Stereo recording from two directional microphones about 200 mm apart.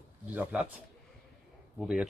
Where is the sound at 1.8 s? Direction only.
5° right (ahead or behind).